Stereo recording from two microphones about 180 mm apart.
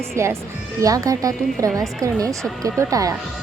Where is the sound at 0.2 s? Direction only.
15° right (ahead or behind).